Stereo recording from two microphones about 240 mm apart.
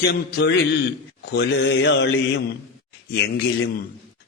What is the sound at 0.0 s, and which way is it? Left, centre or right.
Mantra, left.